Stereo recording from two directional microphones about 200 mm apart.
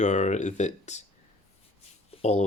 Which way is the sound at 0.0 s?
35° left (ahead or behind).